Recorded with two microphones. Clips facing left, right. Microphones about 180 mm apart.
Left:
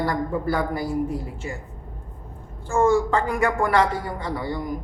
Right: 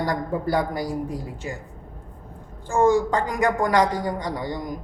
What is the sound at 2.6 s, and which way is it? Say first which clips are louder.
A man's voice: even; 15° right (ahead or behind).